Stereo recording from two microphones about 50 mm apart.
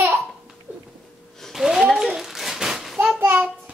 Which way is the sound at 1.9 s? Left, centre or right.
Centre.